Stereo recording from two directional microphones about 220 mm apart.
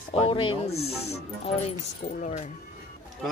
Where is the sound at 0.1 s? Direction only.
25° left (ahead or behind).